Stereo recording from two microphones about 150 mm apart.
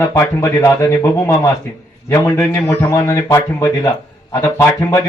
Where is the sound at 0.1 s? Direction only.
20° left (ahead or behind).